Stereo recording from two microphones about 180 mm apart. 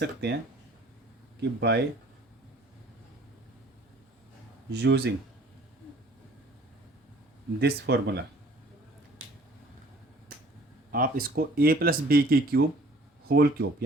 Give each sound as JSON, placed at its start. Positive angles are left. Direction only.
{"t": 0.0, "sound": "speech", "side_deg": -70}
{"t": 1.4, "sound": "speech", "side_deg": -70}
{"t": 4.7, "sound": "speech", "side_deg": -70}
{"t": 7.6, "sound": "speech", "side_deg": -65}
{"t": 10.9, "sound": "speech", "side_deg": -55}